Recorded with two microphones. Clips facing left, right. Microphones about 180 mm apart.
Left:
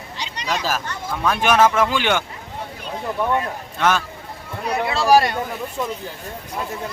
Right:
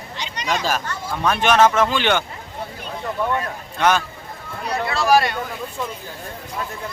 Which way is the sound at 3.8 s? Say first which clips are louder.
Right 1 dB; centre (ahead or behind).